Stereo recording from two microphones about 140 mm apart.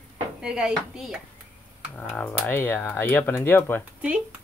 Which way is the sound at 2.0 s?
15° left (ahead or behind).